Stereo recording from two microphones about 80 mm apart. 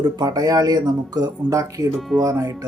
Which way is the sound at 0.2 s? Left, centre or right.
Right.